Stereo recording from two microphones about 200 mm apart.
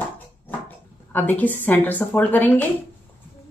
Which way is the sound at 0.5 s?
10° left (ahead or behind).